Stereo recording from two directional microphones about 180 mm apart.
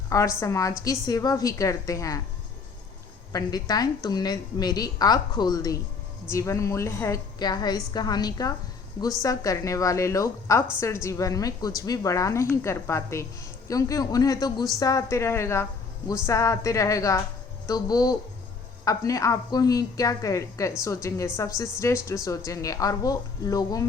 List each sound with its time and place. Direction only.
0.1 s a woman's voice: 15° left (ahead or behind)
3.3 s a woman's voice: 20° left (ahead or behind)